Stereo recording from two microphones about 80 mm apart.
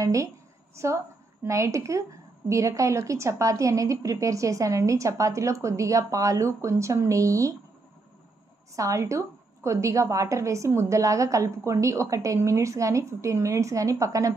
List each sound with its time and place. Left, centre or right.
0.0 s a woman's voice: right
8.7 s a woman's voice: right